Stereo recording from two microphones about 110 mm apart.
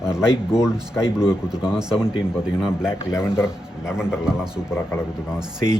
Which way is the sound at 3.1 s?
25° left (ahead or behind).